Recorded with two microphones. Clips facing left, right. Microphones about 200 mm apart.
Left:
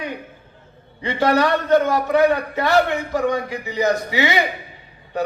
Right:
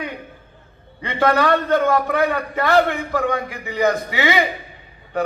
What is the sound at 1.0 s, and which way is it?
A man's voice, 55° right (ahead or behind).